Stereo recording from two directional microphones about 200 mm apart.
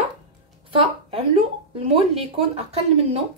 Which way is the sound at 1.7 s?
30° right (ahead or behind).